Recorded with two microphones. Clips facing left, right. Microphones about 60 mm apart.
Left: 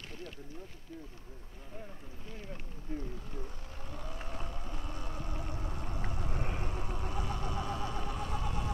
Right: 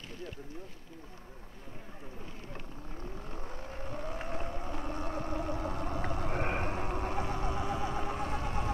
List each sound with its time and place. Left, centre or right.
3.3 s boat: right